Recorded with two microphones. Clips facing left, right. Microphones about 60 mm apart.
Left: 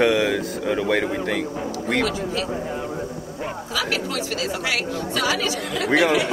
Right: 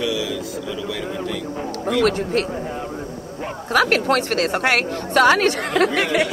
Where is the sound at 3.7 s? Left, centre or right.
Right.